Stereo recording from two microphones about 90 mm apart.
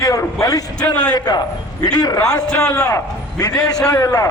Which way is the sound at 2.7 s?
30° left (ahead or behind).